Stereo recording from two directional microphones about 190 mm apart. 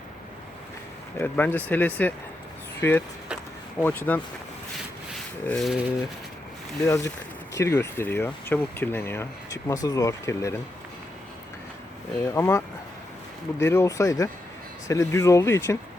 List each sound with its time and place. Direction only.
1.2 s speech: 10° left (ahead or behind)
5.1 s rub: centre (ahead or behind)
6.8 s speech: 15° left (ahead or behind)
12.2 s speech: 15° left (ahead or behind)